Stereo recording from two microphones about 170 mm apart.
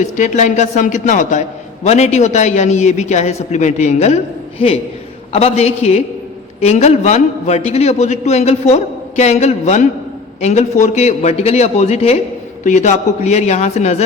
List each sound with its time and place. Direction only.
0.0 s a man's voice: 45° left (ahead or behind)